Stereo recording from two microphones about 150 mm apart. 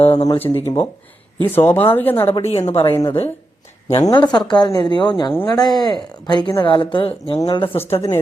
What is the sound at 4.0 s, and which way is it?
A woman's voice, 25° left (ahead or behind).